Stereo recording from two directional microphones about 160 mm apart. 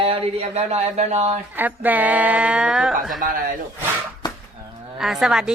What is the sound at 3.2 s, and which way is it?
Speech, 60° right (ahead or behind).